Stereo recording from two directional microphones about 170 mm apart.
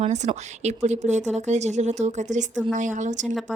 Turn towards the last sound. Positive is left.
turn(degrees=-45)  # may be behind; listen again after turning